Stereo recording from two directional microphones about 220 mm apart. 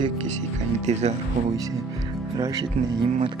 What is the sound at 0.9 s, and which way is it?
Speech, 30° right (ahead or behind).